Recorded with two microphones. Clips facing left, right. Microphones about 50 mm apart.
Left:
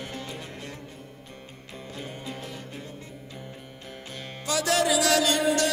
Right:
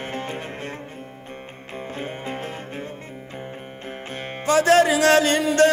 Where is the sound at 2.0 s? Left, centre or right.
Right.